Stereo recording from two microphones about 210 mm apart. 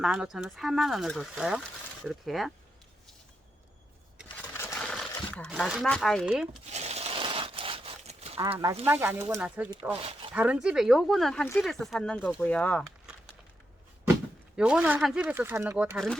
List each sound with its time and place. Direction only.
0.0 s speech: 5° right (ahead or behind)
4.5 s a sound: 10° left (ahead or behind)
5.5 s speech: 5° right (ahead or behind)
6.7 s a sound: 30° right (ahead or behind)
8.9 s speech: 10° right (ahead or behind)
10.0 s speech: 25° right (ahead or behind)
10.3 s speech: 5° right (ahead or behind)
14.5 s speech: 5° right (ahead or behind)